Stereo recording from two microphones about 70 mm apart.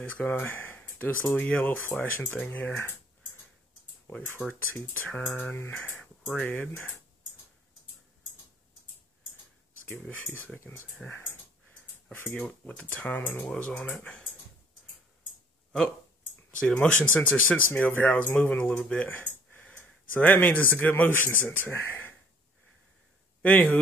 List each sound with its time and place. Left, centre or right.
0.0 s speech: left
4.1 s speech: left
4.7 s speech: left
9.8 s speech: left
12.4 s speech: centre
13.5 s speech: centre
16.7 s speech: left
18.8 s speech: centre
19.0 s speech: left
23.4 s speech: left